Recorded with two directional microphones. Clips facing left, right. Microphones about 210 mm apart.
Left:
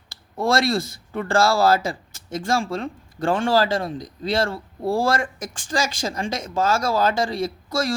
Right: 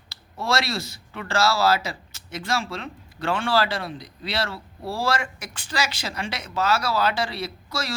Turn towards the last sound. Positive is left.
turn(degrees=50)  # may be behind; listen again after turning